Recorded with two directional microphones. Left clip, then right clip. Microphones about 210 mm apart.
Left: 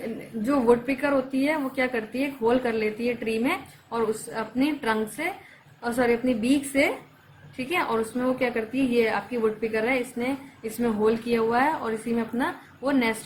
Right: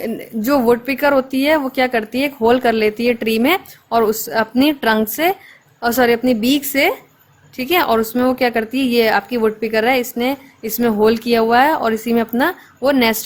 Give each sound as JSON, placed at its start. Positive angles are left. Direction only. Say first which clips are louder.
{"t": 0.4, "sound": "speech", "louder": "right 7 dB", "side_deg": -55}